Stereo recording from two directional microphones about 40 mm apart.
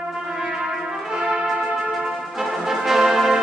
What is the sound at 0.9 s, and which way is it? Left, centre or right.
Brass instrument, centre.